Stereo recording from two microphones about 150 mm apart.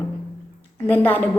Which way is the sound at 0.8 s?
10° left (ahead or behind).